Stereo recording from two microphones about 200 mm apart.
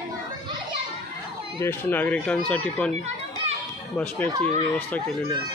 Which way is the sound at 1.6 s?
10° left (ahead or behind).